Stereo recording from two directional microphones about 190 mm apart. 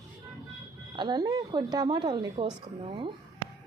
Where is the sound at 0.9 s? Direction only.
20° right (ahead or behind).